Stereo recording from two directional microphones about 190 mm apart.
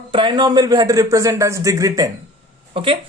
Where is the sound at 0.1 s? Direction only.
25° right (ahead or behind).